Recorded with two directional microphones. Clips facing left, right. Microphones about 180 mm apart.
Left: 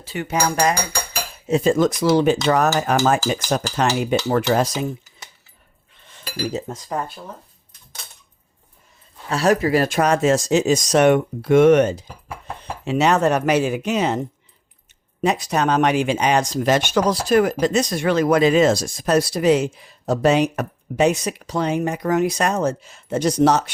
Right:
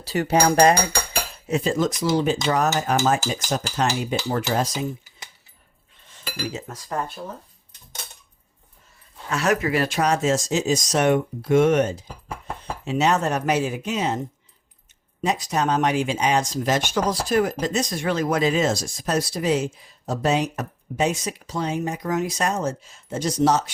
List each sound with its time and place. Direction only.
0.0 s speech: 40° right (ahead or behind)
1.6 s speech: 55° left (ahead or behind)
6.5 s cutlery: 35° left (ahead or behind)
6.7 s speech: 15° left (ahead or behind)
9.3 s speech: 35° left (ahead or behind); by 14.2 s 70° left (ahead or behind)
15.2 s speech: 65° left (ahead or behind)